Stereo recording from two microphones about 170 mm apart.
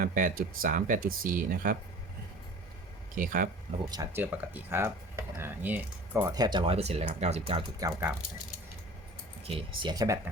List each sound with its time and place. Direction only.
0.0 s speech: 55° right (ahead or behind)
3.2 s speech: 55° right (ahead or behind)
3.8 s speech: 20° right (ahead or behind); by 7.6 s 35° right (ahead or behind)
7.8 s speech: 20° right (ahead or behind)
9.4 s speech: 35° right (ahead or behind)